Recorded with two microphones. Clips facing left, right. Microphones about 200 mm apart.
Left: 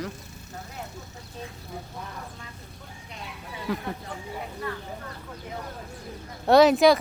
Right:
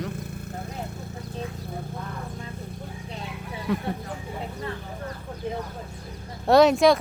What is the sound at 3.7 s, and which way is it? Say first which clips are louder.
Speech: right 3 dB; centre (ahead or behind).